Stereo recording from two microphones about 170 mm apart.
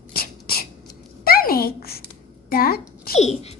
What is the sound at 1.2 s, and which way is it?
A child's voice, 60° left (ahead or behind).